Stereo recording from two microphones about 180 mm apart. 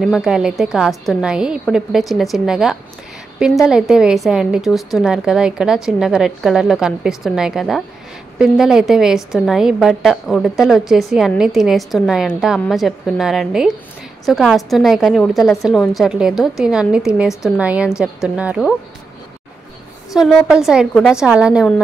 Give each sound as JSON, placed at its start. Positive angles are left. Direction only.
{"t": 0.0, "sound": "a woman's voice", "side_deg": 0}
{"t": 20.2, "sound": "a woman's voice", "side_deg": -5}